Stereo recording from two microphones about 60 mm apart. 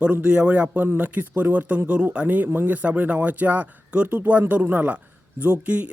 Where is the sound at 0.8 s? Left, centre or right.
Right.